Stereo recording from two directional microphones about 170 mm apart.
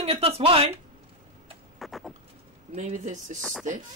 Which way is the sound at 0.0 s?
35° right (ahead or behind).